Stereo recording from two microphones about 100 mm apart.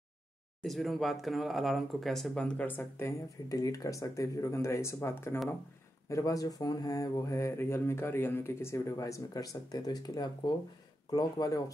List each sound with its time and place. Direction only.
0.6 s speech: centre (ahead or behind); by 3.2 s 25° left (ahead or behind)
3.4 s speech: 35° left (ahead or behind)